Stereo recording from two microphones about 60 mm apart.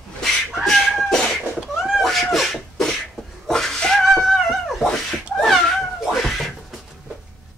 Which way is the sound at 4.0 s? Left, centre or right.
Centre.